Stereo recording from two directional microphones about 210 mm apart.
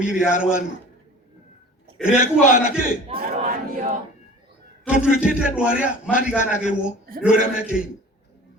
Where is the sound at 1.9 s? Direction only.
5° right (ahead or behind).